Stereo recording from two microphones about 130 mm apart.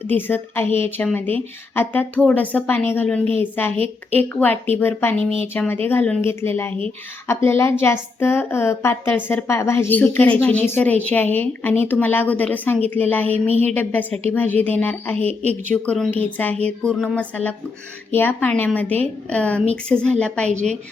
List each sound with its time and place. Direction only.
0.1 s a woman's voice: 15° left (ahead or behind)
15.2 s a woman's voice: 50° right (ahead or behind)
15.7 s a woman's voice: 10° left (ahead or behind)